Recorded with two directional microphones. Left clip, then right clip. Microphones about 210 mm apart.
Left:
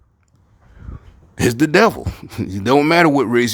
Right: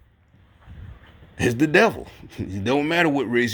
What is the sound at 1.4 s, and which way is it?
Speech, 30° left (ahead or behind).